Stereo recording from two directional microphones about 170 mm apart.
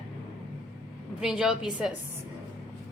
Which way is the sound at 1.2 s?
5° right (ahead or behind).